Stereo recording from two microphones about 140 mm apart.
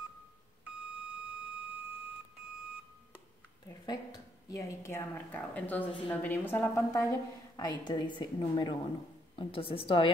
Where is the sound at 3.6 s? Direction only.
30° left (ahead or behind).